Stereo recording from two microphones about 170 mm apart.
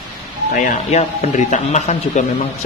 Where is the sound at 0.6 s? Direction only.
45° left (ahead or behind).